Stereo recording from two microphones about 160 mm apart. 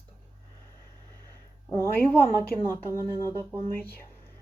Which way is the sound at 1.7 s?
20° left (ahead or behind).